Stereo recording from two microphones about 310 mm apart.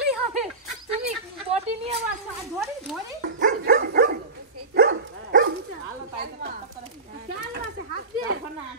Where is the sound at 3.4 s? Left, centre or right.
Right.